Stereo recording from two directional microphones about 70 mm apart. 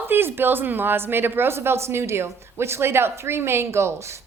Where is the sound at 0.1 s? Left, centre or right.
Right.